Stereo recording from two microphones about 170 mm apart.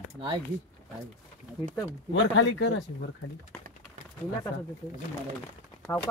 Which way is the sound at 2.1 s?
90° left.